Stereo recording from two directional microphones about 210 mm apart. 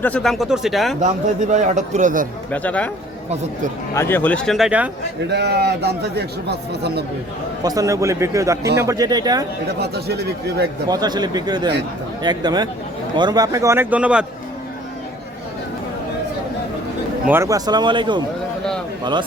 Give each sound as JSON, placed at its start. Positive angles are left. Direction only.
{"t": 0.0, "sound": "speech", "side_deg": 5}
{"t": 1.0, "sound": "a man's voice", "side_deg": -35}
{"t": 2.5, "sound": "speech", "side_deg": 5}
{"t": 3.9, "sound": "speech", "side_deg": 10}
{"t": 5.3, "sound": "a man's voice", "side_deg": -55}
{"t": 7.6, "sound": "speech", "side_deg": -15}
{"t": 9.8, "sound": "a man's voice", "side_deg": -50}
{"t": 10.8, "sound": "speech", "side_deg": -20}
{"t": 17.2, "sound": "speech", "side_deg": -10}